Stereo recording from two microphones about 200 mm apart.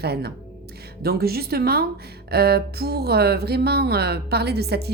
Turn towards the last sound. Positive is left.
turn(degrees=-55)  # may be behind; listen again after turning